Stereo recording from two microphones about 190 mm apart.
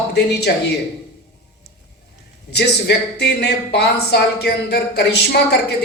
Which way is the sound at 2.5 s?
60° left (ahead or behind).